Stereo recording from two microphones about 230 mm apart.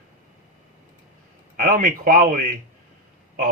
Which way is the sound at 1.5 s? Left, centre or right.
Right.